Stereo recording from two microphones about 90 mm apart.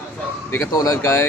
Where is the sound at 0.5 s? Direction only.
35° left (ahead or behind).